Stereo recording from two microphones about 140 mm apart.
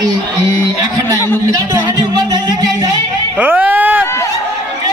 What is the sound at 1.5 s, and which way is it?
Speech, 25° right (ahead or behind).